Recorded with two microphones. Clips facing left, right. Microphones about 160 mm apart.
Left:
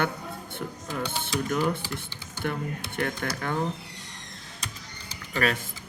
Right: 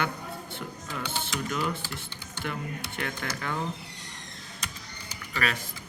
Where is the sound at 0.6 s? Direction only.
40° left (ahead or behind).